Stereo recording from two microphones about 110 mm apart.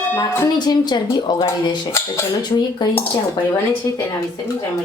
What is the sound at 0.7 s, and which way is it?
A woman's voice, 40° left (ahead or behind).